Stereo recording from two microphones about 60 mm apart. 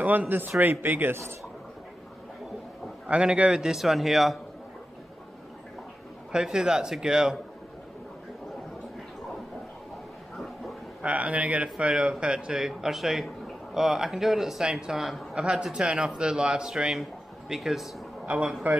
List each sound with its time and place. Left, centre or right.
0.0 s a man's voice: right
3.1 s speech: centre
6.3 s speech: centre
10.3 s a sound: centre
11.0 s speech: right; by 17.8 s centre
18.2 s a man's voice: centre